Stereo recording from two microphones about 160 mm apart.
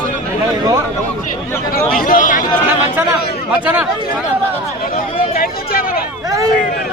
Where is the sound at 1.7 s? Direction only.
60° left (ahead or behind).